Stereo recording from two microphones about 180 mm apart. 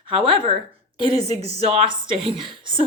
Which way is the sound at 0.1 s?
30° right (ahead or behind).